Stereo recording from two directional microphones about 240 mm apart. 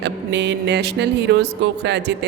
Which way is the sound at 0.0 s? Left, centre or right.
Right.